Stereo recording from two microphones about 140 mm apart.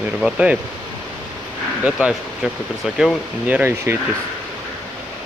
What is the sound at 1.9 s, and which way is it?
Speech, 5° right (ahead or behind).